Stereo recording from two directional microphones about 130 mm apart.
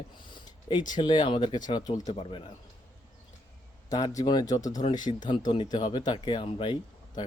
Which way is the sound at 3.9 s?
25° left (ahead or behind).